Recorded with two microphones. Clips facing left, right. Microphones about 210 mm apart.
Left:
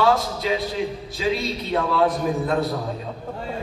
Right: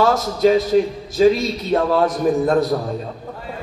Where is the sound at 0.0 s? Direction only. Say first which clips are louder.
Right 5 dB; 45° right (ahead or behind).